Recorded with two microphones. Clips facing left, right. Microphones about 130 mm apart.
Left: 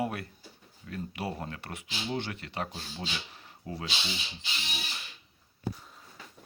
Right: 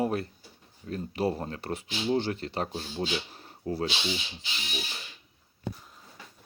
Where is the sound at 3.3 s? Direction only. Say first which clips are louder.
Right 8 dB; 40° right (ahead or behind).